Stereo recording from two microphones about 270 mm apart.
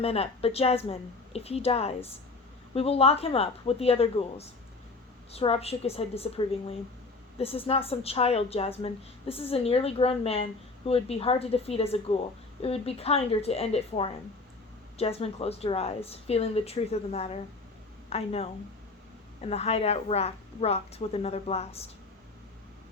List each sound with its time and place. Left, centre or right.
0.0 s a woman's voice: left